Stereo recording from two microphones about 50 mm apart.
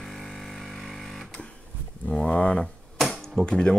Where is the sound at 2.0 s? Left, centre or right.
Centre.